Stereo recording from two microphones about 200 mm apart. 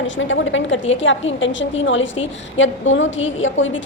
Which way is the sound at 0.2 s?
70° left (ahead or behind).